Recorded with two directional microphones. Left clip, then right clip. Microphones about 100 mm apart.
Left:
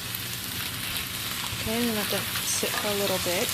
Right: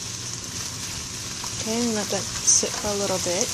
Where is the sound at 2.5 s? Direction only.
30° right (ahead or behind).